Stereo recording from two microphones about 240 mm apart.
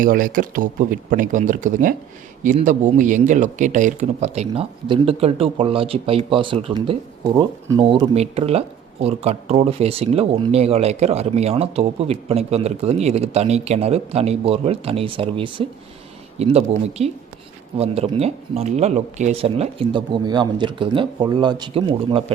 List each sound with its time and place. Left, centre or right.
0.0 s speech: right